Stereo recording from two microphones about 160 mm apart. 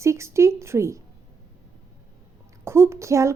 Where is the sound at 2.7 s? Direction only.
15° right (ahead or behind).